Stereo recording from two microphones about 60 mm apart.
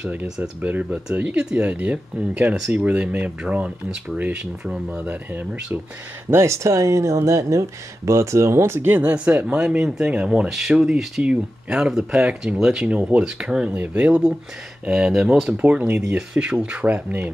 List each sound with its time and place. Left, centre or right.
0.1 s speech: right
0.8 s speech: centre
5.0 s speech: right
6.3 s speech: right
9.1 s speech: right